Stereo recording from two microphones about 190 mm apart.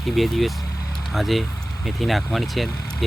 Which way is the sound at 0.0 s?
Centre (ahead or behind).